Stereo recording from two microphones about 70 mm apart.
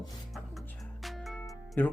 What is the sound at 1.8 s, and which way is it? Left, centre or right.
Speech, left.